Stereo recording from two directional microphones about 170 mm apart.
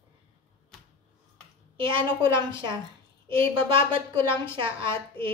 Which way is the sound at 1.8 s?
30° right (ahead or behind).